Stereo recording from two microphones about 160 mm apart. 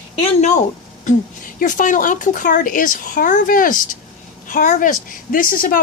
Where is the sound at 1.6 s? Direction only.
55° left (ahead or behind).